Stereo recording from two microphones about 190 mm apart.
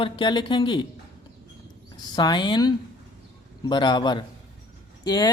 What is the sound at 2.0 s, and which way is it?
A woman's voice, 20° left (ahead or behind).